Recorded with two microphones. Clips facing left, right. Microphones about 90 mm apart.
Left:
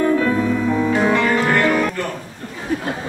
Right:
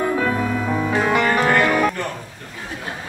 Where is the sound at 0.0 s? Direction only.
10° right (ahead or behind).